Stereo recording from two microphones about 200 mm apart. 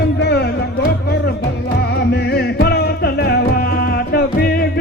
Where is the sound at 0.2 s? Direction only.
55° left (ahead or behind).